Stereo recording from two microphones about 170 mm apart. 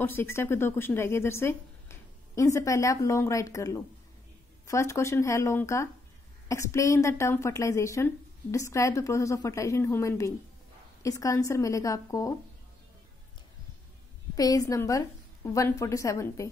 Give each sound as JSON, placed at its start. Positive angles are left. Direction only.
{"t": 0.0, "sound": "a woman's voice", "side_deg": 15}
{"t": 14.3, "sound": "a woman's voice", "side_deg": 20}